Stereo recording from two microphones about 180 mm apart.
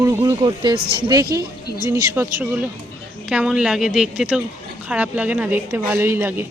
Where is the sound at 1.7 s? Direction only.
50° right (ahead or behind).